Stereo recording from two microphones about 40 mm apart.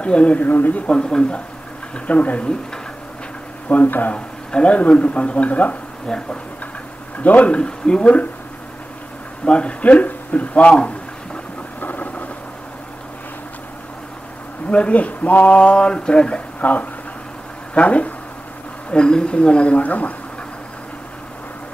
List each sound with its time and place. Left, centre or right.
0.0 s speech: left
0.4 s speech: left
0.7 s speech: left
2.0 s speech: left
3.6 s speech: left
4.5 s speech: left
7.2 s speech: left
9.4 s speech: left
11.8 s vehicle: left
14.7 s speech: left
15.6 s speech: left
17.7 s speech: left
18.9 s speech: left